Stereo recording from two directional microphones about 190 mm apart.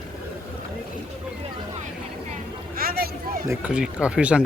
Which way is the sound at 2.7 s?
50° right (ahead or behind).